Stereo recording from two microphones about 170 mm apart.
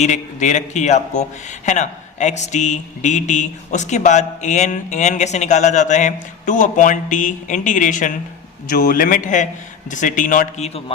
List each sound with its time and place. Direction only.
0.0 s speech: 45° left (ahead or behind)